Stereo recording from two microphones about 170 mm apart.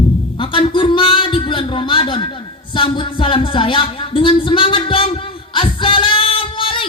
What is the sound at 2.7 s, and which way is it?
Speech, 30° left (ahead or behind).